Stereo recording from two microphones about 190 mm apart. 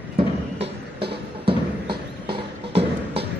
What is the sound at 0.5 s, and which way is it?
Music, 65° right (ahead or behind).